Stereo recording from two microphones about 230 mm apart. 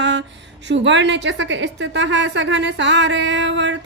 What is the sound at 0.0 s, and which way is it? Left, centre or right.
A woman's voice, right.